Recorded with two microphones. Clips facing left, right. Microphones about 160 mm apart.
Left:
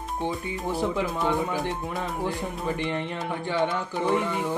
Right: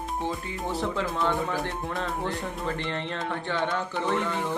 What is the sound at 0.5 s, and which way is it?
Speech, 10° left (ahead or behind).